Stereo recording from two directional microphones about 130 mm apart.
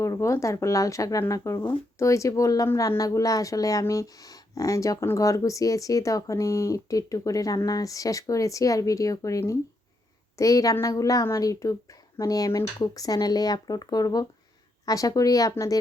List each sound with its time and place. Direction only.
0.0 s a woman's voice: 20° left (ahead or behind)